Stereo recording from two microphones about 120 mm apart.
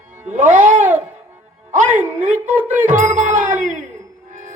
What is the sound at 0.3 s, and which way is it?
Music, 90° right.